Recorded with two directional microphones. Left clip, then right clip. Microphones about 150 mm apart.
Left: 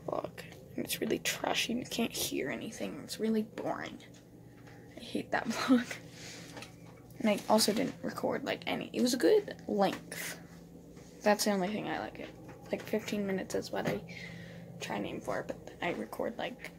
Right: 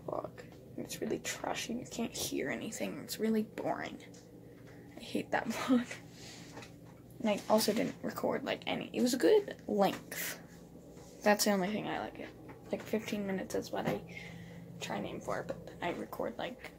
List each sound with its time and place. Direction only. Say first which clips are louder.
0.0 s a sound: left 3 dB; 20° left (ahead or behind)
2.1 s speech: left 2 dB; 10° left (ahead or behind)
2.4 s speech: even; 5° right (ahead or behind)
5.0 s speech: even; 5° right (ahead or behind)
5.5 s speech: left 3 dB; 25° left (ahead or behind)
7.2 s speech: left 2 dB; 25° left (ahead or behind)